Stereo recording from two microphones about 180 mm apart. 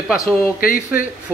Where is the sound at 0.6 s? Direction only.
50° left (ahead or behind).